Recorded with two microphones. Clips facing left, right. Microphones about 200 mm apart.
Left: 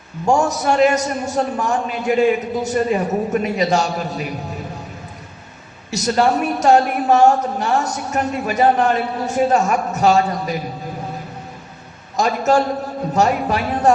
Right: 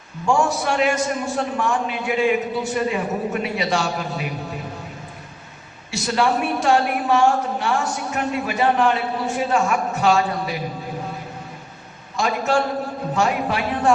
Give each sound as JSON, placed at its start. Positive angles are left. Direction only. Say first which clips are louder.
{"t": 0.3, "sound": "a woman's voice", "louder": "left 3 dB", "side_deg": 40}
{"t": 5.9, "sound": "a woman's voice", "louder": "left 4 dB", "side_deg": 40}
{"t": 12.1, "sound": "a man's voice", "louder": "left 4 dB", "side_deg": 40}